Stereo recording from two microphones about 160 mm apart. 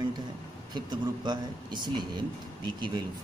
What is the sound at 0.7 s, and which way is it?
Speech, 30° right (ahead or behind).